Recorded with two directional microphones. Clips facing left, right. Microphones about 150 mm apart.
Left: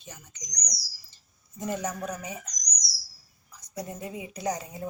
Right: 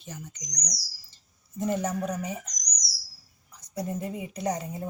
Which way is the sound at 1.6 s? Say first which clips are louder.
Right 4 dB; 25° right (ahead or behind).